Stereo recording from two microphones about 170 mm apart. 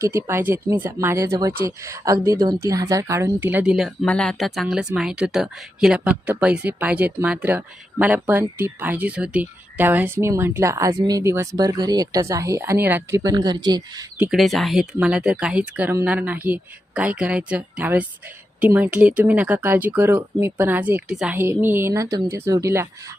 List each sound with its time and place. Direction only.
0.0 s speech: 15° right (ahead or behind)
14.2 s speech: centre (ahead or behind)